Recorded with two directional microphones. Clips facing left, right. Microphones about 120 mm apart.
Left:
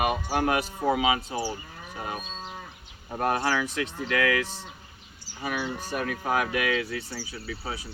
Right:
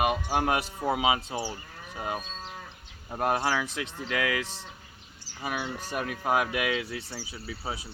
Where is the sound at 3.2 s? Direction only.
10° right (ahead or behind).